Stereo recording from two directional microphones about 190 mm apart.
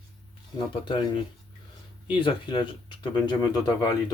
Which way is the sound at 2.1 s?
25° left (ahead or behind).